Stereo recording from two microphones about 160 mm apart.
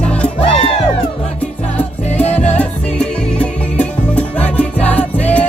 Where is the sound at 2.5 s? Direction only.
10° left (ahead or behind).